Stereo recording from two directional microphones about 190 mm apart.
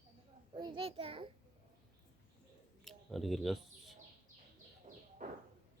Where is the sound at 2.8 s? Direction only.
Centre (ahead or behind).